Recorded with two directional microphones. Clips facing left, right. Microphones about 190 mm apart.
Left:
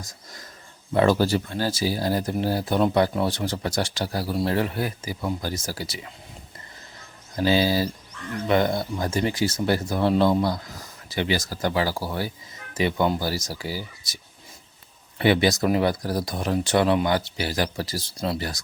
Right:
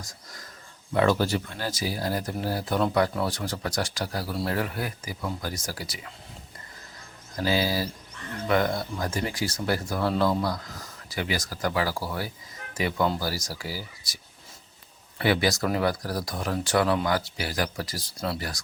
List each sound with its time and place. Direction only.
0.9 s speech: 35° left (ahead or behind)
7.3 s speech: 25° left (ahead or behind)
15.2 s speech: 25° left (ahead or behind)